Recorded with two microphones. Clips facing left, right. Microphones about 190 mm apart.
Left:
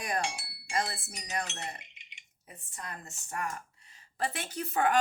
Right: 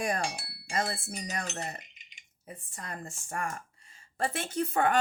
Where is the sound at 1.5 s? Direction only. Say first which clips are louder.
Right 4 dB; 40° right (ahead or behind).